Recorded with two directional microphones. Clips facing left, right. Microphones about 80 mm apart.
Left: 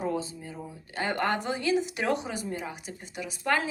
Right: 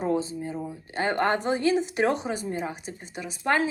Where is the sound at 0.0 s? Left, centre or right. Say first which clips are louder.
Right 5 dB; right.